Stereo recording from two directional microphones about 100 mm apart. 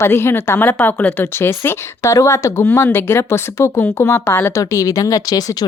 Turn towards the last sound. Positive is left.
turn(degrees=40)  # may be behind; listen again after turning